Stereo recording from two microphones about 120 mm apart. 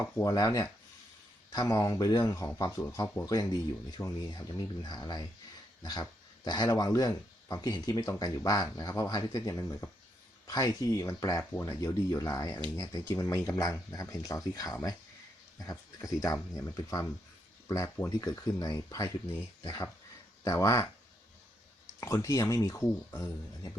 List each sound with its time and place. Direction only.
0.2 s speech: 30° left (ahead or behind)
22.0 s speech: 25° left (ahead or behind)